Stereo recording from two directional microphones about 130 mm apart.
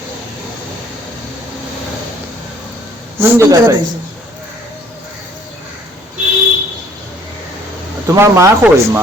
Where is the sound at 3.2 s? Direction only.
25° right (ahead or behind).